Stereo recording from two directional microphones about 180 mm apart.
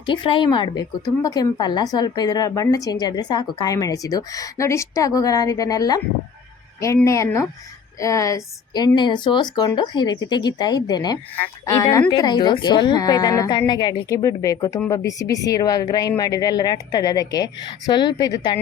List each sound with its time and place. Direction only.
0.0 s a woman's voice: 25° left (ahead or behind)